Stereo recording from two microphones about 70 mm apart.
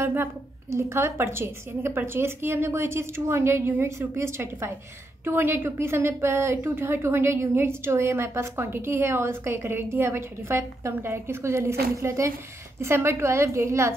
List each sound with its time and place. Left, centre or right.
0.0 s a woman's voice: right